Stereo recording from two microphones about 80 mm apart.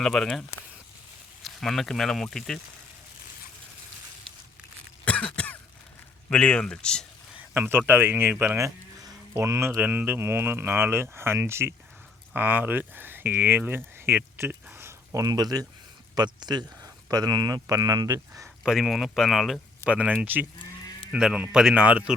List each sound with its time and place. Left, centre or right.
0.0 s speech: centre
5.0 s cough: centre
6.3 s speech: centre
7.5 s speech: right
8.5 s sheep: right
9.3 s speech: right
12.3 s speech: right
15.2 s speech: right
18.6 s speech: centre
19.8 s speech: centre
21.2 s speech: centre